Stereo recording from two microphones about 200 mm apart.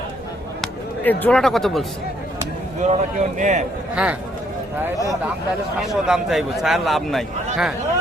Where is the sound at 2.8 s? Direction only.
40° right (ahead or behind).